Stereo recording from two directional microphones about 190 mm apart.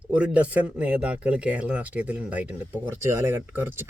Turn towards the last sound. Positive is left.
turn(degrees=-10)  # may be behind; listen again after turning